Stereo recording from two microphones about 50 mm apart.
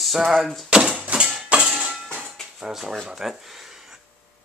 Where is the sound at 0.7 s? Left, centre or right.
Centre.